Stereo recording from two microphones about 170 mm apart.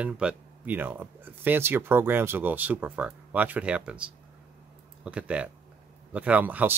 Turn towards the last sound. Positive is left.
turn(degrees=-10)  # may be behind; listen again after turning